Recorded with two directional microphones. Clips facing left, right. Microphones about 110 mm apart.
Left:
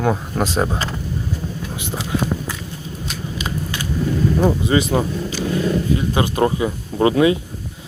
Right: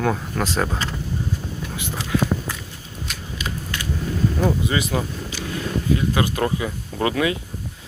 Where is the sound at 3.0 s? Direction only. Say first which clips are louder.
Left 3 dB; 25° left (ahead or behind).